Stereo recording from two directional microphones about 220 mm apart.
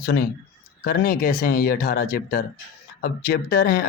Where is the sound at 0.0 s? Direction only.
45° left (ahead or behind).